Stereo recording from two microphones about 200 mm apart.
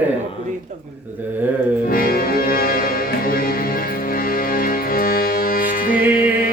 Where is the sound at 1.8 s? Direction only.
45° left (ahead or behind).